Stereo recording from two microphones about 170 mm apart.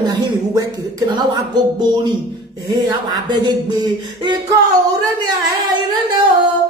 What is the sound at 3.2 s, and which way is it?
Speech, 25° right (ahead or behind).